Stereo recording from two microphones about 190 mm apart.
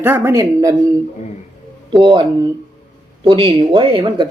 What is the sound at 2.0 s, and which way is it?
Speech, 25° right (ahead or behind).